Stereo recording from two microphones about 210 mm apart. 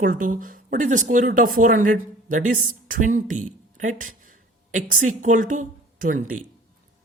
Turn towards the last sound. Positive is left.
turn(degrees=-40)  # may be behind; listen again after turning